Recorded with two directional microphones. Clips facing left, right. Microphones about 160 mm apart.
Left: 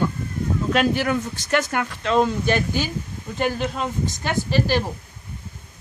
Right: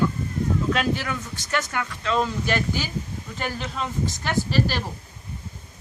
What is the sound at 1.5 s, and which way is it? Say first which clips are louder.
Speech: left 4 dB; 60° left (ahead or behind).